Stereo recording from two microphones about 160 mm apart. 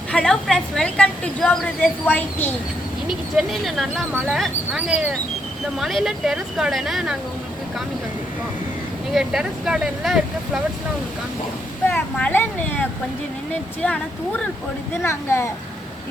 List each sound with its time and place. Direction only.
0.1 s a woman's voice: 5° left (ahead or behind)
3.1 s speech: centre (ahead or behind)
9.1 s speech: 5° right (ahead or behind)
11.9 s a woman's voice: 10° left (ahead or behind)
13.5 s a woman's voice: 10° left (ahead or behind)
15.0 s a woman's voice: 15° left (ahead or behind)